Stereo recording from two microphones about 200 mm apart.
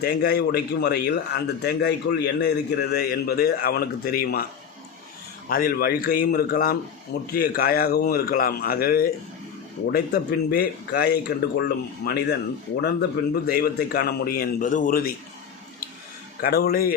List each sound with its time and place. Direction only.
0.0 s a man's voice: 50° left (ahead or behind)
5.5 s a man's voice: 45° left (ahead or behind)
16.4 s a man's voice: 50° left (ahead or behind)